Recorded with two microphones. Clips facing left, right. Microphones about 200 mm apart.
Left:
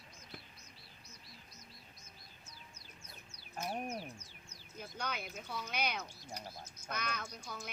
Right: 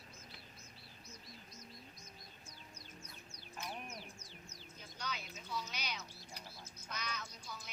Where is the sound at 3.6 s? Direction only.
50° left (ahead or behind).